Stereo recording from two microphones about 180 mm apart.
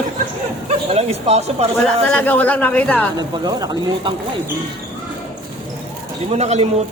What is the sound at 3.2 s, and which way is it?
Speech, 20° right (ahead or behind).